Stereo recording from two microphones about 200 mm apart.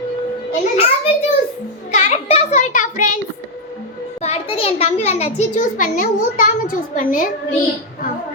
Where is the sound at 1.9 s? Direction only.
35° left (ahead or behind).